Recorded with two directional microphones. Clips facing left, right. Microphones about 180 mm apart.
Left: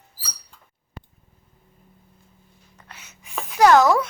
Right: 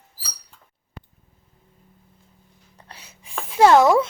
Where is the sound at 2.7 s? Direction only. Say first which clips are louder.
Right 1 dB; 35° right (ahead or behind).